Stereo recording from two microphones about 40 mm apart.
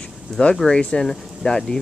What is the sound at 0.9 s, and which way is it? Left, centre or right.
Speech, centre.